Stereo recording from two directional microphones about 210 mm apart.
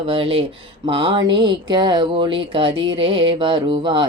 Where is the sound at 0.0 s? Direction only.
25° right (ahead or behind).